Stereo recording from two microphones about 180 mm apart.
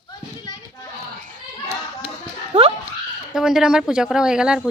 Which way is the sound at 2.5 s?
30° right (ahead or behind).